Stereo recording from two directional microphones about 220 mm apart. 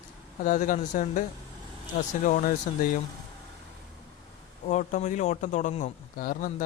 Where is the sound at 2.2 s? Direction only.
35° left (ahead or behind).